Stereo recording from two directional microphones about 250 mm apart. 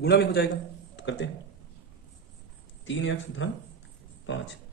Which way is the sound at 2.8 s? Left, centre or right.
Left.